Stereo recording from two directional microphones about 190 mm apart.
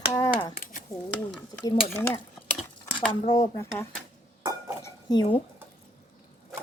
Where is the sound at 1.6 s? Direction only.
15° left (ahead or behind).